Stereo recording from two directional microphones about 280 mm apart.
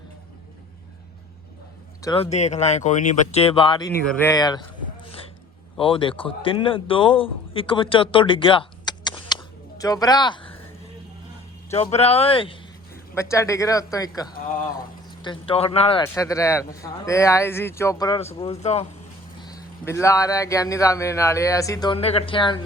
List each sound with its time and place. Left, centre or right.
2.0 s speech: centre
4.0 s speech: centre
5.8 s a man's voice: centre
11.7 s speech: left
15.2 s speech: centre
19.4 s speech: centre